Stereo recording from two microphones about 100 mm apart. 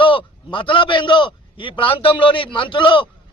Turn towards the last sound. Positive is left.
turn(degrees=55)  # may be behind; listen again after turning